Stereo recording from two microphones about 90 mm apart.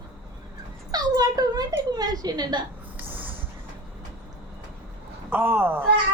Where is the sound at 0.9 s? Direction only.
45° right (ahead or behind).